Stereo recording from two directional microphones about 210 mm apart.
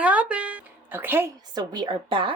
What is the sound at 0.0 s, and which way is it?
A woman's voice, 5° right (ahead or behind).